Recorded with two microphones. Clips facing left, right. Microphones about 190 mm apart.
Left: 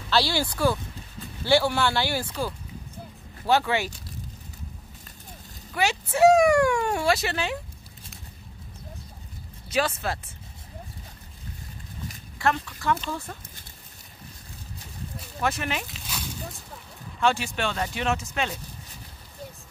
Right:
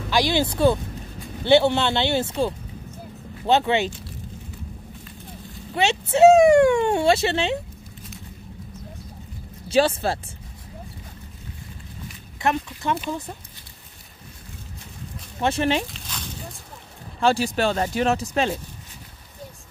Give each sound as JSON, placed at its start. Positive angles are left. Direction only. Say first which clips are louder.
{"t": 0.1, "sound": "speech", "louder": "right 3 dB", "side_deg": -20}
{"t": 5.7, "sound": "speech", "louder": "right 4 dB", "side_deg": -25}
{"t": 9.7, "sound": "speech", "louder": "right 7 dB", "side_deg": -30}
{"t": 12.4, "sound": "speech", "louder": "right 2 dB", "side_deg": -20}
{"t": 15.4, "sound": "speech", "louder": "right 7 dB", "side_deg": -30}
{"t": 15.9, "sound": "a sound", "louder": "even", "side_deg": 5}
{"t": 17.2, "sound": "speech", "louder": "right 5 dB", "side_deg": -35}